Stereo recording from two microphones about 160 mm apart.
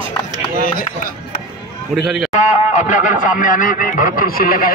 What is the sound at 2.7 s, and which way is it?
A man's voice, 50° left (ahead or behind).